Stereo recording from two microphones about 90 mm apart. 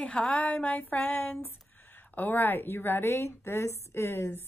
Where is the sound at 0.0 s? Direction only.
15° left (ahead or behind).